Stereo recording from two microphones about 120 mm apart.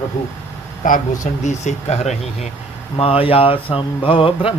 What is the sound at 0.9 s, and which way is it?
Speech, 90° left.